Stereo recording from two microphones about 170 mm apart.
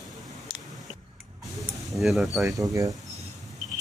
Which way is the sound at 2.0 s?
Centre (ahead or behind).